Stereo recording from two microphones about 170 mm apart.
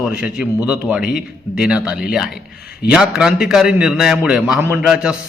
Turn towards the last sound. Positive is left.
turn(degrees=-5)  # may be behind; listen again after turning